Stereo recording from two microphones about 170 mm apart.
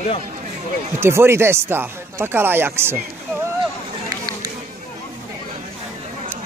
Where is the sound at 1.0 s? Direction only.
15° right (ahead or behind).